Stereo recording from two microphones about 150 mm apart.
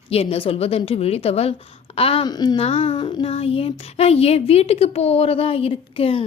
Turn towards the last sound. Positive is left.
turn(degrees=35)  # may be behind; listen again after turning